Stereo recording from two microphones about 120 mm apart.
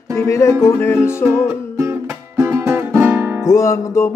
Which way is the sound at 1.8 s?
20° right (ahead or behind).